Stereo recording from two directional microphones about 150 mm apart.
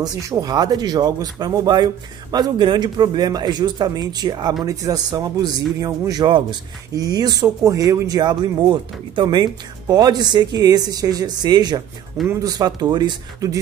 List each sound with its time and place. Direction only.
0.0 s speech: 20° right (ahead or behind)